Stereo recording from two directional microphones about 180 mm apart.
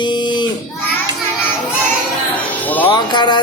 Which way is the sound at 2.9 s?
25° left (ahead or behind).